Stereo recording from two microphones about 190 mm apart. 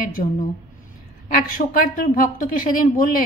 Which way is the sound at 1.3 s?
50° left (ahead or behind).